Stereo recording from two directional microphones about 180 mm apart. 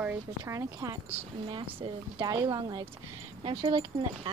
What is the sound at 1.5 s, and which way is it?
A woman's voice, 25° right (ahead or behind).